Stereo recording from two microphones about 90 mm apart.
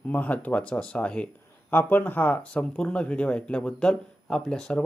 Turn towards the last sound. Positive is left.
turn(degrees=10)  # may be behind; listen again after turning